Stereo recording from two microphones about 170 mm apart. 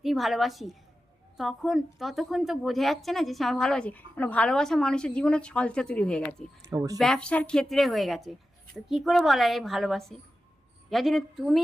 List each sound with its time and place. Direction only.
0.0 s a woman's voice: centre (ahead or behind)
6.7 s speech: 20° right (ahead or behind)
7.0 s a woman's voice: 5° left (ahead or behind)